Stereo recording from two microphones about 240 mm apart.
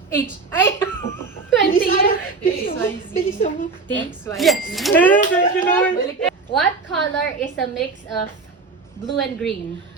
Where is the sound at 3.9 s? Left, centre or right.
Centre.